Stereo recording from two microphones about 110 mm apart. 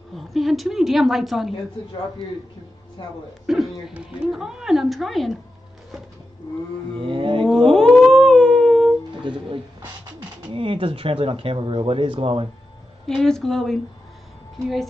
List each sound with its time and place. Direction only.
0.1 s speech: centre (ahead or behind)
3.0 s speech: 50° left (ahead or behind)
3.4 s speech: 5° right (ahead or behind)
7.0 s roaring cats: 50° right (ahead or behind)
7.4 s humming: 5° left (ahead or behind)
9.1 s speech: 50° right (ahead or behind)
13.0 s speech: 5° left (ahead or behind)